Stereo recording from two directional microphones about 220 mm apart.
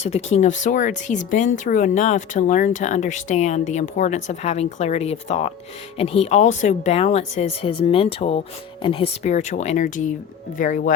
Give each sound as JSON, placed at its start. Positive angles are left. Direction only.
{"t": 0.0, "sound": "speech", "side_deg": 30}